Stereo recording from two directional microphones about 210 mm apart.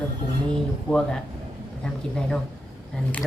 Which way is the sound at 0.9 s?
Centre (ahead or behind).